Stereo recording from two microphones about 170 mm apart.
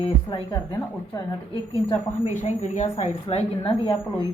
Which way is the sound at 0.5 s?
20° left (ahead or behind).